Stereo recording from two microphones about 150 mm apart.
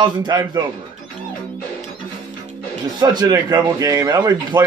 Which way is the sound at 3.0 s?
25° right (ahead or behind).